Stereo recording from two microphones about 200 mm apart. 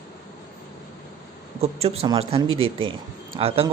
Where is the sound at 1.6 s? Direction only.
30° right (ahead or behind).